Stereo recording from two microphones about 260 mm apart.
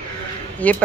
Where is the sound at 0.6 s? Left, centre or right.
Centre.